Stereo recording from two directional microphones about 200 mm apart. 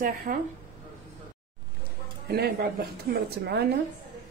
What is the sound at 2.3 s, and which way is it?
A woman's voice, 50° right (ahead or behind).